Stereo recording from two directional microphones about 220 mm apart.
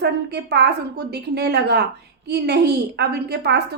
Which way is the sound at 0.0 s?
50° right (ahead or behind).